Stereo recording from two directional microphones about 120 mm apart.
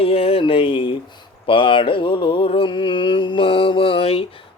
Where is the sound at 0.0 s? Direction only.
50° left (ahead or behind).